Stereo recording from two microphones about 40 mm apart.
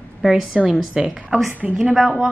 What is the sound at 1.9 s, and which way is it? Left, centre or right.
Speech, centre.